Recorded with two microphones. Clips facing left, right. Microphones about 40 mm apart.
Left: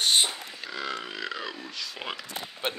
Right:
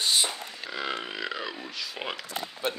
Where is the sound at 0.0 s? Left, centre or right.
Left.